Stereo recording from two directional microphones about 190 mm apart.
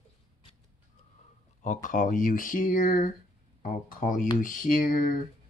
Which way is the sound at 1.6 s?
40° left (ahead or behind).